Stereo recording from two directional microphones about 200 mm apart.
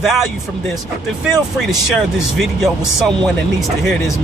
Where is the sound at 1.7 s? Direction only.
Centre (ahead or behind).